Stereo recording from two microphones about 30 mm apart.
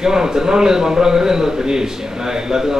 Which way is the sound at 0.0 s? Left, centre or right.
Right.